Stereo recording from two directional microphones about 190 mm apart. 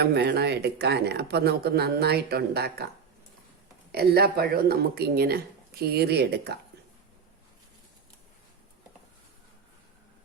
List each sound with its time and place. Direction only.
0.0 s speech: 60° right (ahead or behind)
3.9 s speech: 55° right (ahead or behind)